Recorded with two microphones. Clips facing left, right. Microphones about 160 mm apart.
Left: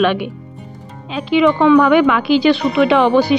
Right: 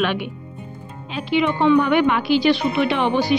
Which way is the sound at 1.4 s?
90° left.